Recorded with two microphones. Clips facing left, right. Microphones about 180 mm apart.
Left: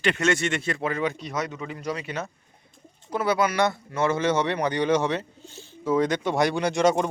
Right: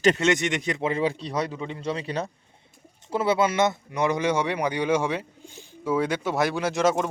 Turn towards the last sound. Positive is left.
turn(degrees=0)  # may be behind; listen again after turning